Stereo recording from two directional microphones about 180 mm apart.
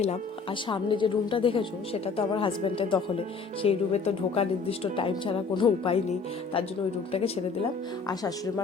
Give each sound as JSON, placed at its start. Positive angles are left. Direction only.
{"t": 0.7, "sound": "a woman's voice", "side_deg": 25}
{"t": 8.0, "sound": "a woman's voice", "side_deg": 20}